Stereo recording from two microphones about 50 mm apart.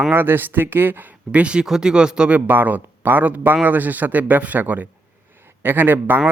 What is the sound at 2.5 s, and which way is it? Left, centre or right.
Speech, right.